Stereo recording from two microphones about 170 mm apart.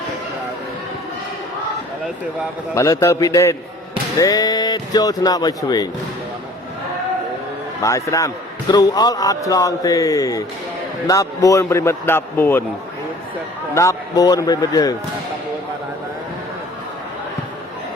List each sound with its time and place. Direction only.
2.7 s a man's voice: 15° left (ahead or behind)
7.8 s a man's voice: 20° left (ahead or behind)
13.7 s speech: 20° left (ahead or behind)